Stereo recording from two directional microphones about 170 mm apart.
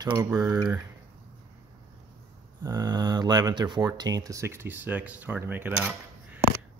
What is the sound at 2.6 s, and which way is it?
Speech, 25° right (ahead or behind).